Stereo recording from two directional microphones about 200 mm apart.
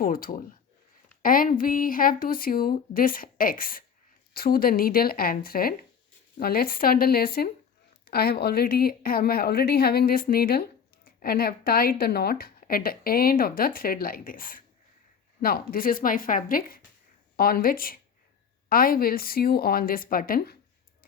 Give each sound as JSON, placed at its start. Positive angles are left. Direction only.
{"t": 0.0, "sound": "speech", "side_deg": 45}